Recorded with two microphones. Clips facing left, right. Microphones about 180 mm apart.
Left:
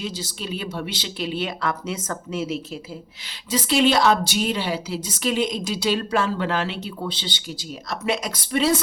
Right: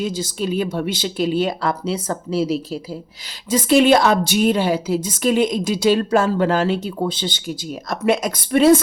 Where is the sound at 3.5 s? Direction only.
50° right (ahead or behind).